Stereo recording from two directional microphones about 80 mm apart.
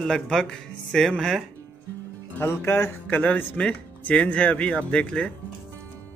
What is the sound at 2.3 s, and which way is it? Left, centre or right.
Speech, left.